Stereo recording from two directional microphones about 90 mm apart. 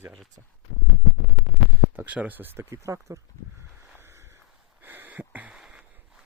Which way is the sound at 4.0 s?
30° right (ahead or behind).